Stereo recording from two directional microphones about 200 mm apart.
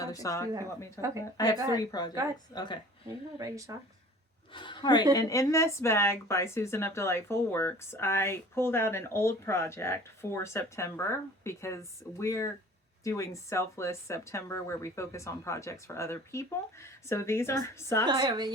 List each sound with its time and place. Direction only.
0.0 s speech: 15° left (ahead or behind)
3.3 s speech: 15° right (ahead or behind)
4.5 s speech: 25° left (ahead or behind)
18.0 s a woman's voice: 20° right (ahead or behind)